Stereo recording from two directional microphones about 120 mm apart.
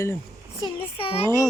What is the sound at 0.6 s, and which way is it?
Speech, 50° left (ahead or behind).